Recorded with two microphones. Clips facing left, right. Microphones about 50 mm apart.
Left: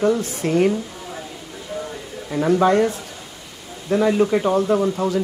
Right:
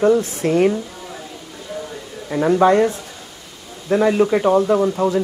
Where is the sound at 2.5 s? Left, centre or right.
Right.